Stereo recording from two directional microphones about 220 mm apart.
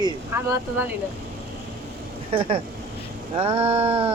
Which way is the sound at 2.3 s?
25° right (ahead or behind).